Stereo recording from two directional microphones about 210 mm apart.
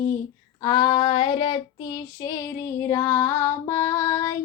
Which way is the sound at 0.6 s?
20° left (ahead or behind).